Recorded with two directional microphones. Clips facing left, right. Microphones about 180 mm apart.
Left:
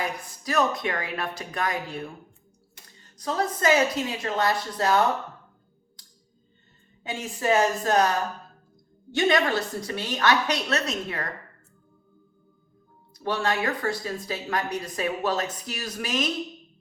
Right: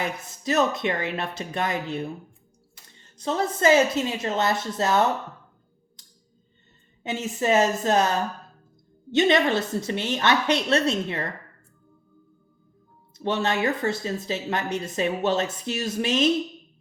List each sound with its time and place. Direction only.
0.0 s speech: 25° right (ahead or behind)
3.2 s speech: 25° right (ahead or behind)
7.0 s speech: 25° right (ahead or behind)
13.1 s speech: 25° right (ahead or behind)